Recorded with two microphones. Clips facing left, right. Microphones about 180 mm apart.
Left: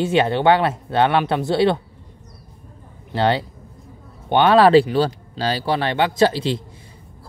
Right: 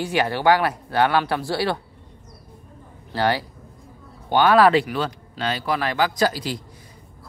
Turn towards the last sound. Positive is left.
turn(degrees=25)  # may be behind; listen again after turning